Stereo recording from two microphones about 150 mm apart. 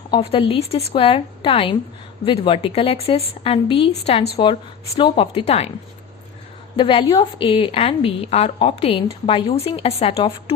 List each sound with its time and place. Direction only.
0.1 s a woman's voice: 40° left (ahead or behind)
6.7 s a woman's voice: 35° left (ahead or behind)